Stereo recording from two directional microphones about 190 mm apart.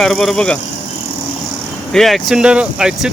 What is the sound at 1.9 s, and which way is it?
Speech, centre (ahead or behind).